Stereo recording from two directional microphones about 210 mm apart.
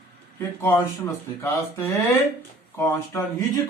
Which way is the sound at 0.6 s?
10° left (ahead or behind).